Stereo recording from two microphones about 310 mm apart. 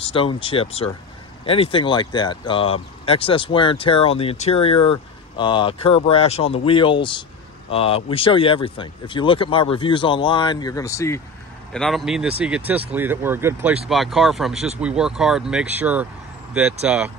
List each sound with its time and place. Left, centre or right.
0.0 s speech: centre